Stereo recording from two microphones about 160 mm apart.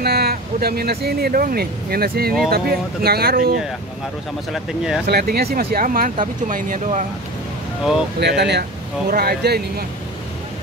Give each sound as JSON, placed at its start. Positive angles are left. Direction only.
{"t": 0.0, "sound": "speech", "side_deg": -85}
{"t": 5.0, "sound": "speech", "side_deg": -80}
{"t": 8.2, "sound": "speech", "side_deg": -90}
{"t": 9.1, "sound": "speech", "side_deg": -75}